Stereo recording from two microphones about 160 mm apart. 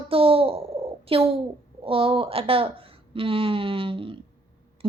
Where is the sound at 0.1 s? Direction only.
35° right (ahead or behind).